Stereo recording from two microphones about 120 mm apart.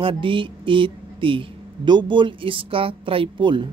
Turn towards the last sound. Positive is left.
turn(degrees=-45)  # may be behind; listen again after turning